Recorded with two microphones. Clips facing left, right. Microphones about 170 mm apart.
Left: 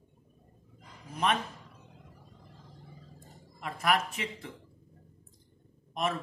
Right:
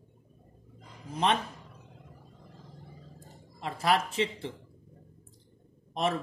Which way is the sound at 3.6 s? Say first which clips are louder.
Right 2 dB; 30° right (ahead or behind).